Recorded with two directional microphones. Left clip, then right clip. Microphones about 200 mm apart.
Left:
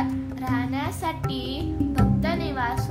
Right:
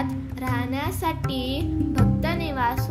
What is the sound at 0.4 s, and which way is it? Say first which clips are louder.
Speech: right 1 dB; 20° right (ahead or behind).